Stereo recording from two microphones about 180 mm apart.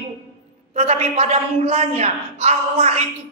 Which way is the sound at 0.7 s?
40° right (ahead or behind).